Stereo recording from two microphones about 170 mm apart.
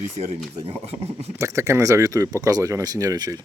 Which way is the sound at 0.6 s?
35° right (ahead or behind).